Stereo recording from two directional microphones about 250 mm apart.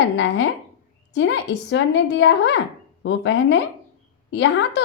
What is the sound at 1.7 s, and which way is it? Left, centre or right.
A woman's voice, left.